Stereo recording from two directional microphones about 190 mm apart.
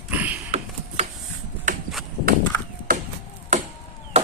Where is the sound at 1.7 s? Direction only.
40° right (ahead or behind).